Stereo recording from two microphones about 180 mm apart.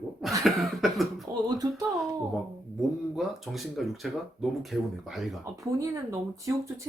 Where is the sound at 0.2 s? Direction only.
Centre (ahead or behind).